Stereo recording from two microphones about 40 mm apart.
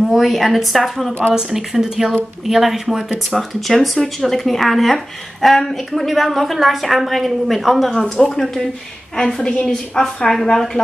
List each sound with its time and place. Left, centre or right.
0.1 s speech: centre
1.3 s speech: centre
3.3 s speech: centre
7.9 s a woman's voice: centre